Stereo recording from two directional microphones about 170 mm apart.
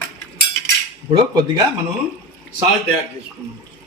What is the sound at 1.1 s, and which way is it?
Speech, 25° right (ahead or behind).